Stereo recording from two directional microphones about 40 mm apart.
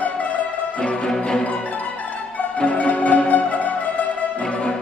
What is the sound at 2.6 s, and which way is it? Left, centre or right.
Music, left.